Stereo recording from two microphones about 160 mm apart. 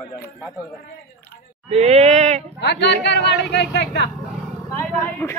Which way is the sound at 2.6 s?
90° left.